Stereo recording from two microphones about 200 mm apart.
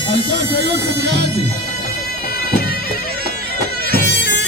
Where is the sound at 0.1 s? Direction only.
60° right (ahead or behind).